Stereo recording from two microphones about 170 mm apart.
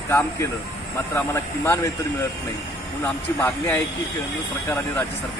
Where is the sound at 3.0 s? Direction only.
10° left (ahead or behind).